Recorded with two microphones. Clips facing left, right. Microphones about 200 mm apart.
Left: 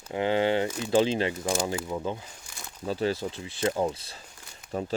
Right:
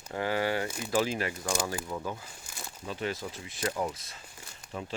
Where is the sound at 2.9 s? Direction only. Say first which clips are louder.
Left 7 dB; 35° left (ahead or behind).